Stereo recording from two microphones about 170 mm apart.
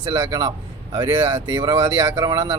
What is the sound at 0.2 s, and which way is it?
A man's voice, 20° right (ahead or behind).